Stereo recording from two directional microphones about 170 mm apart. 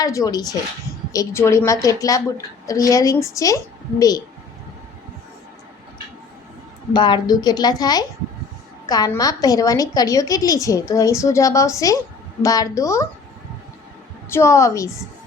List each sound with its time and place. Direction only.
0.0 s a woman's voice: 20° left (ahead or behind)
6.9 s a woman's voice: 25° left (ahead or behind)
14.3 s a woman's voice: 15° left (ahead or behind)